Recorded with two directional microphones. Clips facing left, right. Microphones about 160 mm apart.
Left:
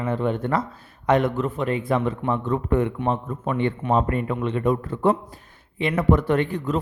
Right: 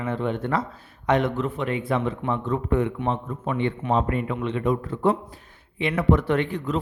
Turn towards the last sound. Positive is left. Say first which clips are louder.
# left 2 dB
turn(degrees=45)  # may be behind; listen again after turning